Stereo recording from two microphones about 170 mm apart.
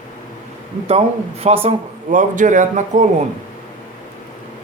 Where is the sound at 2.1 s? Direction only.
50° right (ahead or behind).